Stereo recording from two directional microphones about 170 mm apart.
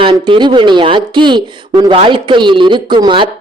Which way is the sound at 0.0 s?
30° right (ahead or behind).